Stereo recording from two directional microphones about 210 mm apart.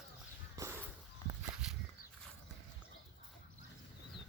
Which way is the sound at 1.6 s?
5° right (ahead or behind).